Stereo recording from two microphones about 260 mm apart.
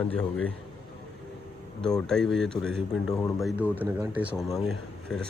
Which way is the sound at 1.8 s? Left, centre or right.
Centre.